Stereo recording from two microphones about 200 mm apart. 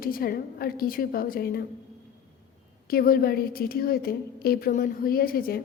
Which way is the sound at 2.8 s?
45° left (ahead or behind).